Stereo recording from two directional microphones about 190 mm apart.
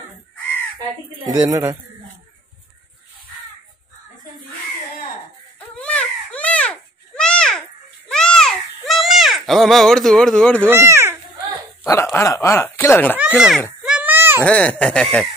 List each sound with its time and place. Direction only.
1.2 s speech: 15° right (ahead or behind)
5.8 s a sound: 5° left (ahead or behind)
10.6 s speech: 10° right (ahead or behind)
11.8 s speech: 15° left (ahead or behind)
13.8 s a sound: 5° right (ahead or behind)
14.4 s speech: 5° left (ahead or behind)